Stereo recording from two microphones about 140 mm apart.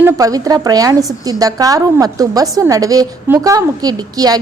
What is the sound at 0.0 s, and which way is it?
A woman's voice, 25° right (ahead or behind).